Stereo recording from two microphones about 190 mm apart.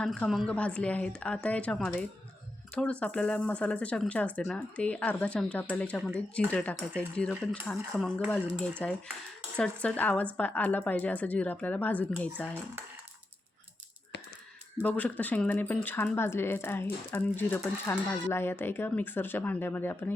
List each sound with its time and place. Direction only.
0.0 s a woman's voice: 5° left (ahead or behind)
14.8 s speech: 5° left (ahead or behind)